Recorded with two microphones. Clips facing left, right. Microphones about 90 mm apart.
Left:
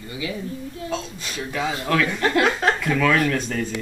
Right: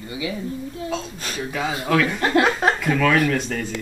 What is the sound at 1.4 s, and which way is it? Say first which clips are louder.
Speech: even; centre (ahead or behind).